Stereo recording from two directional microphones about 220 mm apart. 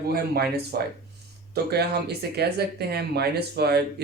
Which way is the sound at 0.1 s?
45° right (ahead or behind).